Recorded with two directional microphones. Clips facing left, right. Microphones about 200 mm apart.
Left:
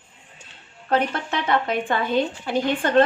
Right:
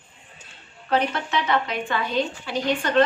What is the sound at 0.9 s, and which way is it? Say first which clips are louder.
A woman's voice: left 1 dB; 55° left (ahead or behind).